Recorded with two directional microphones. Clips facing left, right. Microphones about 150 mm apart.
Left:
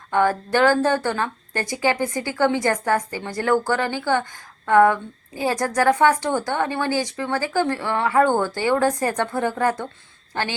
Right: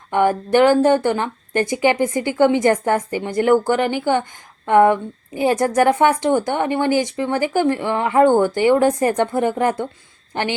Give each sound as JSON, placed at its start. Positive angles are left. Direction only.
{"t": 0.1, "sound": "a woman's voice", "side_deg": -20}